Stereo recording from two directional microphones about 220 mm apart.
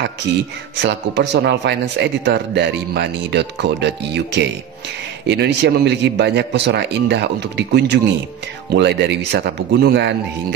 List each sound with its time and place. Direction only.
0.0 s speech: 50° right (ahead or behind)